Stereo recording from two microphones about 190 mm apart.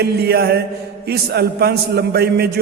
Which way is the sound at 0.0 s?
55° right (ahead or behind).